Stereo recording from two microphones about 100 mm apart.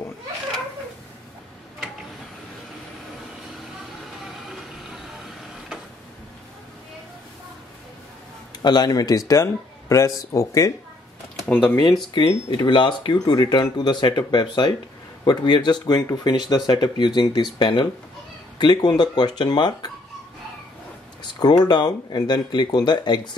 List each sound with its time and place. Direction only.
8.6 s speech: 45° left (ahead or behind)
11.4 s speech: 15° left (ahead or behind)
12.4 s speech: 50° left (ahead or behind)
21.2 s speech: 45° left (ahead or behind)